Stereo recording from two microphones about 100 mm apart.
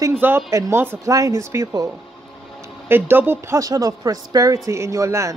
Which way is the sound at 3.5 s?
35° right (ahead or behind).